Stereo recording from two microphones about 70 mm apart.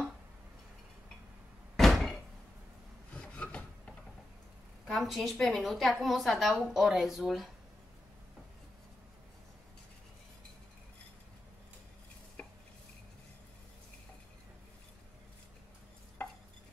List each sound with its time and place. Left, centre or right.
1.8 s door: centre
3.2 s a sound: centre
4.9 s a woman's voice: centre
12.4 s stir: centre
16.2 s chopping: centre